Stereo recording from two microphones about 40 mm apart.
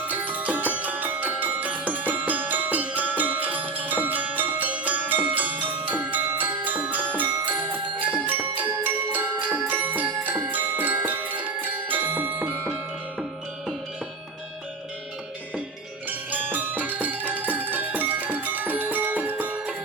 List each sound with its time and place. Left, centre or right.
0.1 s music: right
16.0 s music: right